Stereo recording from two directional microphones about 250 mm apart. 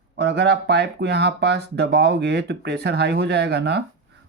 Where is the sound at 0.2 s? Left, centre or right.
Right.